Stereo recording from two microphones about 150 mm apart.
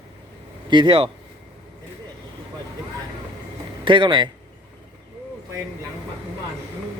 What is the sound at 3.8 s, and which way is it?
Speech, 35° right (ahead or behind).